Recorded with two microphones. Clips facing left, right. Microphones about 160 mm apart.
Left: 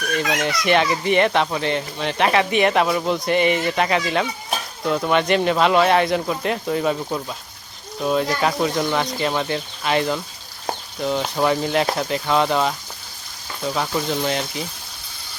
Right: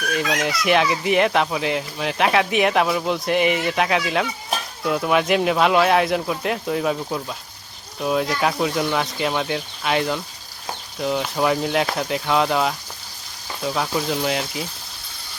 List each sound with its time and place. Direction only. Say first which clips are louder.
0.1 s speech: left 1 dB; centre (ahead or behind)